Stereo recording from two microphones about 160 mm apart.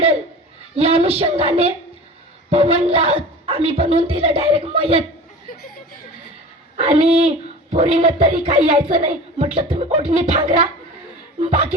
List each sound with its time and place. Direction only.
0.8 s a woman's voice: 35° right (ahead or behind)
6.7 s a woman's voice: 40° right (ahead or behind)